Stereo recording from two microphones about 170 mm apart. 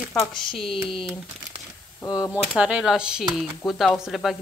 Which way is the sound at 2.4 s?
5° right (ahead or behind).